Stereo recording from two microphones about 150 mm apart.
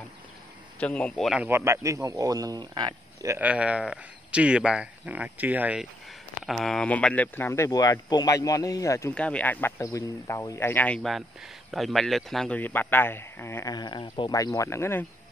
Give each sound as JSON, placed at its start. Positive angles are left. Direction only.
{"t": 0.7, "sound": "speech", "side_deg": 10}
{"t": 1.4, "sound": "speech", "side_deg": -15}
{"t": 3.3, "sound": "speech", "side_deg": -10}
{"t": 9.1, "sound": "speech", "side_deg": 10}
{"t": 13.7, "sound": "speech", "side_deg": 30}